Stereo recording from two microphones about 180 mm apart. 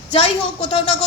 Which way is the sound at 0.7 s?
30° left (ahead or behind).